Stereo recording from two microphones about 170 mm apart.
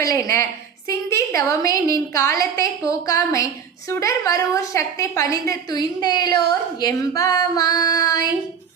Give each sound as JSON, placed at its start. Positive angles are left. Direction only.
{"t": 0.0, "sound": "a woman's voice", "side_deg": 20}